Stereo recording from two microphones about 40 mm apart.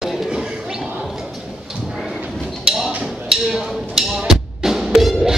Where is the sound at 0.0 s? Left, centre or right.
Centre.